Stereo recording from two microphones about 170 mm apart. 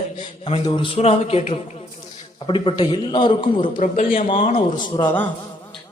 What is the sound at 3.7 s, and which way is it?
Speech, 50° left (ahead or behind).